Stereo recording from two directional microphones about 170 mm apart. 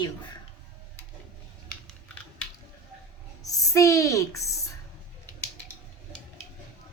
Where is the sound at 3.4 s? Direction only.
20° left (ahead or behind).